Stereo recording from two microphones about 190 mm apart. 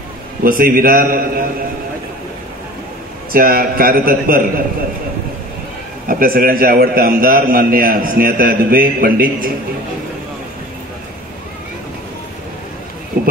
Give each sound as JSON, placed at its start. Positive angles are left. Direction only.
{"t": 0.4, "sound": "a man's voice", "side_deg": -50}
{"t": 3.3, "sound": "a man's voice", "side_deg": -50}
{"t": 6.0, "sound": "a man's voice", "side_deg": -50}